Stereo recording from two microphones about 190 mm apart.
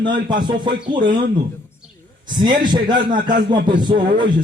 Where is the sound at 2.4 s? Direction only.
25° right (ahead or behind).